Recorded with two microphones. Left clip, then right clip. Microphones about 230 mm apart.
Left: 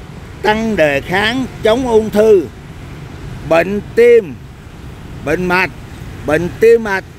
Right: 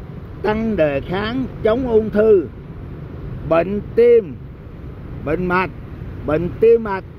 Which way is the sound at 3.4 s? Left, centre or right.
Centre.